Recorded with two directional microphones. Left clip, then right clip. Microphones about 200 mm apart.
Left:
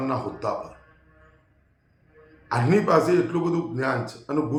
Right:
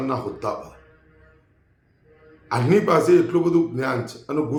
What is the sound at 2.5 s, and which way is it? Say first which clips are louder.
A man's voice: right 2 dB; 15° right (ahead or behind).